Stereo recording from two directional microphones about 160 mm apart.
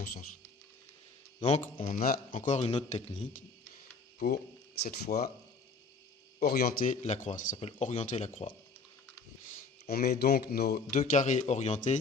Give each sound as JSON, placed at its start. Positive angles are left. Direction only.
{"t": 0.0, "sound": "speech", "side_deg": 65}
{"t": 1.5, "sound": "speech", "side_deg": 40}
{"t": 2.0, "sound": "speech", "side_deg": 65}
{"t": 2.3, "sound": "speech", "side_deg": 45}
{"t": 4.8, "sound": "speech", "side_deg": 75}
{"t": 6.4, "sound": "speech", "side_deg": 70}
{"t": 6.9, "sound": "speech", "side_deg": 45}
{"t": 9.9, "sound": "speech", "side_deg": 75}
{"t": 11.0, "sound": "speech", "side_deg": 50}